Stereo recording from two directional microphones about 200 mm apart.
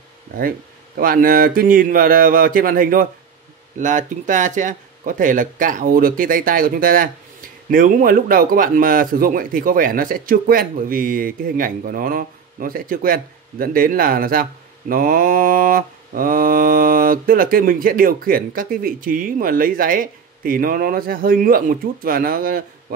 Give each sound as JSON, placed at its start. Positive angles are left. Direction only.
{"t": 0.4, "sound": "speech", "side_deg": -45}